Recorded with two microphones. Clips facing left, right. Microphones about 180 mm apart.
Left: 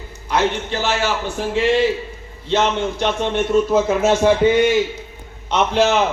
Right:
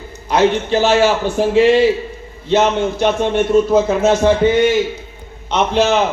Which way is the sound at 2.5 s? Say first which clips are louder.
Right 4 dB; 10° right (ahead or behind).